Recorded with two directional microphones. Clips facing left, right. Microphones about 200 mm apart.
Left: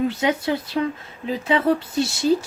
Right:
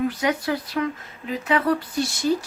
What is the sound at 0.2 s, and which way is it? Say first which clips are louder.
Speech: left 2 dB; 25° left (ahead or behind).